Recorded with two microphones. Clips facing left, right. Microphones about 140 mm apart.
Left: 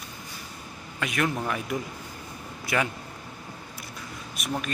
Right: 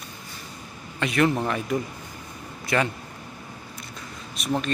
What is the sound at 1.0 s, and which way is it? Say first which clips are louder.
Speech: right 6 dB; centre (ahead or behind).